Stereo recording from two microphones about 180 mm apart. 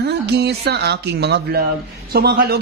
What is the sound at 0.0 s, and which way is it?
Speech, 65° right (ahead or behind).